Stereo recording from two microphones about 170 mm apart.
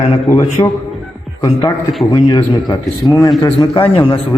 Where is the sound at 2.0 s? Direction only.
25° left (ahead or behind).